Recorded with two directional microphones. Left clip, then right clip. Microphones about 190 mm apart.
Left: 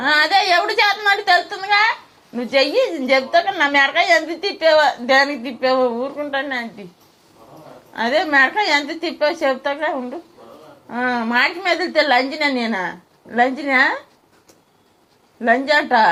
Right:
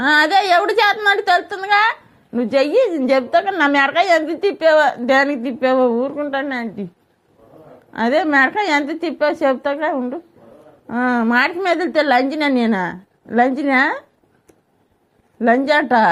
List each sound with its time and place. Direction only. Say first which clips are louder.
0.0 s a woman's voice: right 1 dB; 60° right (ahead or behind)
7.9 s a woman's voice: right 1 dB; 50° right (ahead or behind)
15.4 s a woman's voice: right 1 dB; 55° right (ahead or behind)